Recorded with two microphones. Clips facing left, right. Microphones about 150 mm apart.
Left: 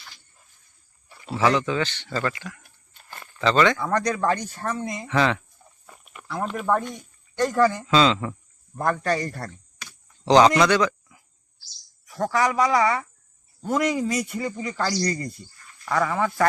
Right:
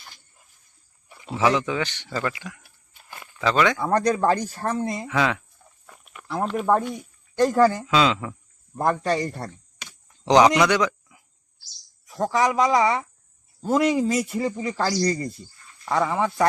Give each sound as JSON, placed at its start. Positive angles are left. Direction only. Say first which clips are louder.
{"t": 1.0, "sound": "speech", "louder": "even", "side_deg": -15}
{"t": 2.0, "sound": "a sound", "louder": "left 1 dB", "side_deg": -10}
{"t": 3.8, "sound": "speech", "louder": "right 3 dB", "side_deg": -30}
{"t": 5.0, "sound": "speech", "louder": "left 4 dB", "side_deg": -5}
{"t": 5.8, "sound": "walk", "louder": "even", "side_deg": 0}
{"t": 6.4, "sound": "speech", "louder": "right 3 dB", "side_deg": 0}
{"t": 8.8, "sound": "speech", "louder": "right 1 dB", "side_deg": -25}
{"t": 9.1, "sound": "a sound", "louder": "right 2 dB", "side_deg": -20}
{"t": 12.0, "sound": "speech", "louder": "right 1 dB", "side_deg": -20}